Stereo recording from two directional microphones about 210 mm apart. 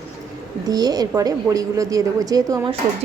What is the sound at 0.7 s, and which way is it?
Speech, 20° right (ahead or behind).